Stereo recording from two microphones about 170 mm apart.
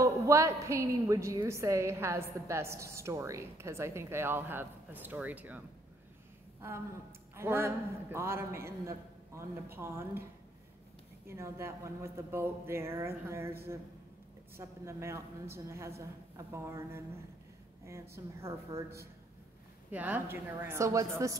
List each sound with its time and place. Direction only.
0.0 s a woman's voice: 20° right (ahead or behind)
7.3 s a woman's voice: 15° right (ahead or behind)
11.2 s a woman's voice: 15° right (ahead or behind)
14.6 s a woman's voice: 15° right (ahead or behind)
18.1 s a woman's voice: 15° right (ahead or behind)